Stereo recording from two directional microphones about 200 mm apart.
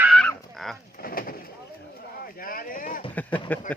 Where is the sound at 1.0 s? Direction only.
45° left (ahead or behind).